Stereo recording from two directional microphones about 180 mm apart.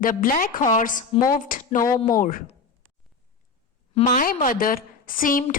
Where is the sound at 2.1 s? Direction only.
50° left (ahead or behind).